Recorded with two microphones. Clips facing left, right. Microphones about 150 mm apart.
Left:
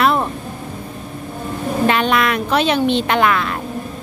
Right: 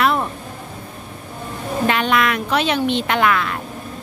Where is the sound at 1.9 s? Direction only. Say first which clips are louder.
Left 1 dB; 35° left (ahead or behind).